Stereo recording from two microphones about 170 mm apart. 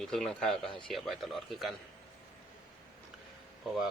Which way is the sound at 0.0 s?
Centre (ahead or behind).